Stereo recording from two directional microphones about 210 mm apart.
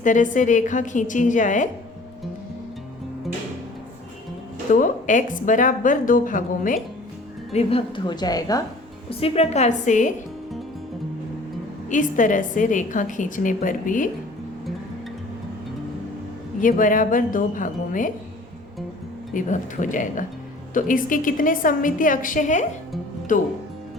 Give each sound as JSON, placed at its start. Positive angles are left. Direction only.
{"t": 0.0, "sound": "a woman's voice", "side_deg": 35}
{"t": 4.7, "sound": "a woman's voice", "side_deg": 40}
{"t": 7.5, "sound": "a woman's voice", "side_deg": 30}
{"t": 9.0, "sound": "a woman's voice", "side_deg": 30}
{"t": 11.9, "sound": "a woman's voice", "side_deg": 40}
{"t": 16.6, "sound": "a woman's voice", "side_deg": 40}
{"t": 19.3, "sound": "a woman's voice", "side_deg": 40}